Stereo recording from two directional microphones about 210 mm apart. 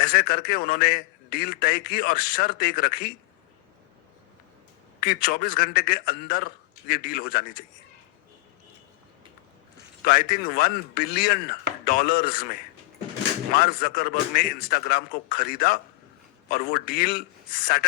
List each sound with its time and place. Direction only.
0.0 s a man's voice: 45° left (ahead or behind)
5.0 s a man's voice: 45° left (ahead or behind)
10.0 s a man's voice: 45° left (ahead or behind)
13.5 s a man's voice: 45° left (ahead or behind)